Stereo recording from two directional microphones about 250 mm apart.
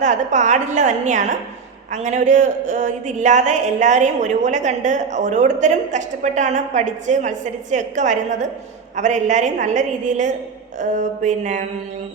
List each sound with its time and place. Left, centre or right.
0.0 s speech: right